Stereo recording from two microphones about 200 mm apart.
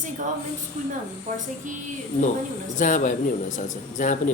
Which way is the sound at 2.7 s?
40° left (ahead or behind).